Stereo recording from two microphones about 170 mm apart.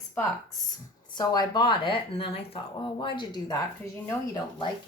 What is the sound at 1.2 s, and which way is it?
Speech, 25° left (ahead or behind).